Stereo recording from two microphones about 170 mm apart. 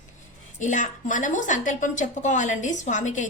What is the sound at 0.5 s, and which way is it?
A woman's voice, 45° left (ahead or behind).